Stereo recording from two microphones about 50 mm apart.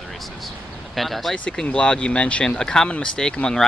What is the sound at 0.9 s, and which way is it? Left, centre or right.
Speech, centre.